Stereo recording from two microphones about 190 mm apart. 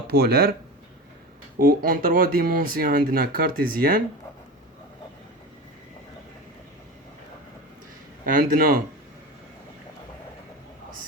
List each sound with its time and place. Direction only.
0.1 s speech: 55° right (ahead or behind)
1.5 s speech: 50° right (ahead or behind)
8.2 s speech: 45° right (ahead or behind)